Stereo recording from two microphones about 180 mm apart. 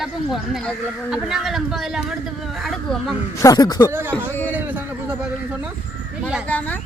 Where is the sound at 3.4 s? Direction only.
20° left (ahead or behind).